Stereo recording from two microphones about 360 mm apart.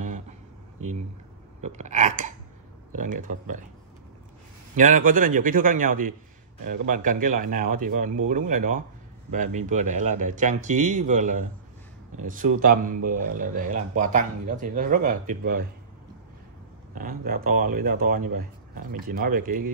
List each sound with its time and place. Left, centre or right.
0.0 s a sound: right
1.6 s a man's voice: centre
4.7 s a man's voice: right
16.9 s a man's voice: right